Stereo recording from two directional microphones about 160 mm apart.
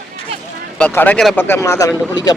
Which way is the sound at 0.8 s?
10° left (ahead or behind).